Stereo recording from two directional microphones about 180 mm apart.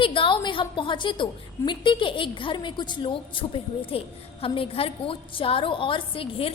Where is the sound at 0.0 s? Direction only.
30° left (ahead or behind).